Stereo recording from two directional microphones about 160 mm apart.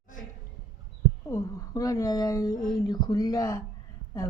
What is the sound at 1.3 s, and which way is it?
Speech, 20° left (ahead or behind).